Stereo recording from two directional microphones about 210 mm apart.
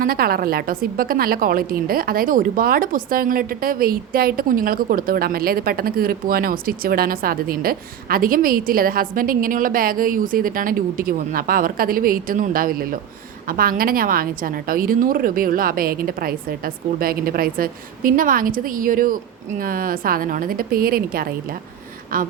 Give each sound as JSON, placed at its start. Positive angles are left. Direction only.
{"t": 0.0, "sound": "a woman's voice", "side_deg": -45}